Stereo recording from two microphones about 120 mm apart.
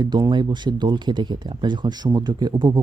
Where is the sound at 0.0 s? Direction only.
35° right (ahead or behind).